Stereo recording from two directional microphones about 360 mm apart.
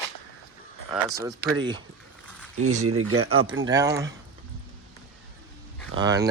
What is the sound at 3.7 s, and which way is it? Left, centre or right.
Speech, centre.